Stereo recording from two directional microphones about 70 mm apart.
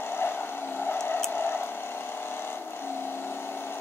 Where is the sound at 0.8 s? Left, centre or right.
Left.